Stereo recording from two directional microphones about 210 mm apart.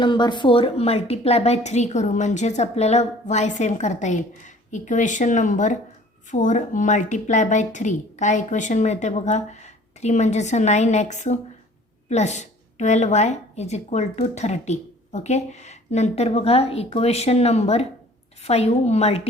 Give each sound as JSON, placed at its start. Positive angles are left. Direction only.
{"t": 0.0, "sound": "a woman's voice", "side_deg": 20}